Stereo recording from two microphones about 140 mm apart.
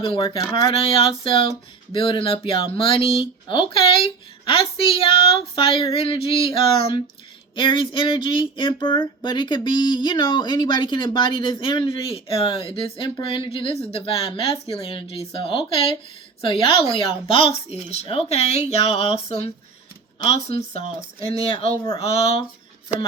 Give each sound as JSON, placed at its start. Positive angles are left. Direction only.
{"t": 0.0, "sound": "speech", "side_deg": 40}